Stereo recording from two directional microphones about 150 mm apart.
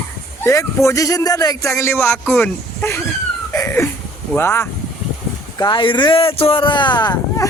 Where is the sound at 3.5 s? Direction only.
15° left (ahead or behind).